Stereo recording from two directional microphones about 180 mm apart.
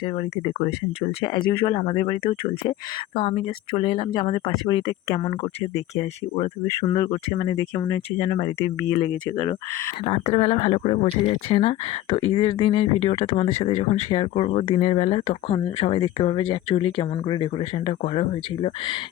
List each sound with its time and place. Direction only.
0.0 s speech: 30° left (ahead or behind)
6.0 s speech: 30° left (ahead or behind); by 9.9 s 15° left (ahead or behind)
10.0 s speech: 35° left (ahead or behind)